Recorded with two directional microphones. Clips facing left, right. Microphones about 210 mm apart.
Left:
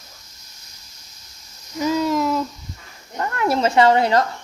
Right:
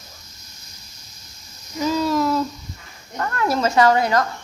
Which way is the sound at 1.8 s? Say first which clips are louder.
Even; 15° left (ahead or behind).